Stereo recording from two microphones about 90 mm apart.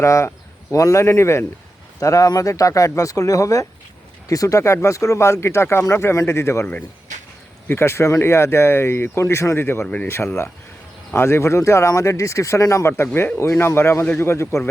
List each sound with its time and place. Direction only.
0.0 s speech: 35° left (ahead or behind)
7.7 s speech: 30° left (ahead or behind)
9.8 s speech: 15° left (ahead or behind)
10.1 s speech: 30° left (ahead or behind)
13.1 s speech: 25° left (ahead or behind)